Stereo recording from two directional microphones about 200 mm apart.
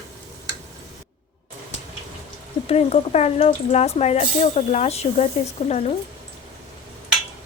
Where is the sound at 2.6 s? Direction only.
30° left (ahead or behind).